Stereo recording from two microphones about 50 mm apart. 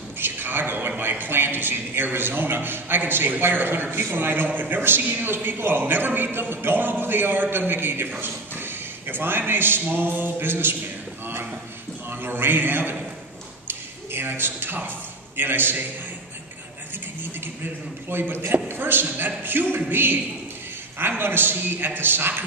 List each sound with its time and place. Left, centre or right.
0.2 s a man's voice: right
8.2 s a sound: right
9.5 s a man's voice: right
12.1 s a man's voice: right
13.7 s a sound: right
15.3 s a man's voice: right
18.1 s a man's voice: right